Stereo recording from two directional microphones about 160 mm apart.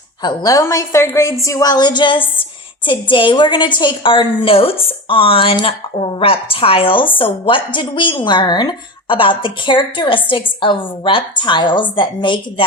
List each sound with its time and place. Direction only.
0.2 s a woman's voice: 25° left (ahead or behind)